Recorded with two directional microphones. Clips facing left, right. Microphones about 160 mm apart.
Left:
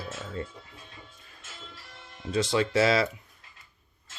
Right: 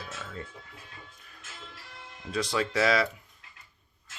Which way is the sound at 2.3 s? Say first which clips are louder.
Left 4 dB; 25° left (ahead or behind).